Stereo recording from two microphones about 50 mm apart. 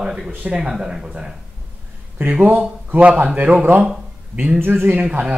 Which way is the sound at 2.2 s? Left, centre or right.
Right.